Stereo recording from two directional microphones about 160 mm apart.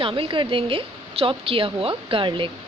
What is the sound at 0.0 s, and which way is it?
A woman's voice, 35° right (ahead or behind).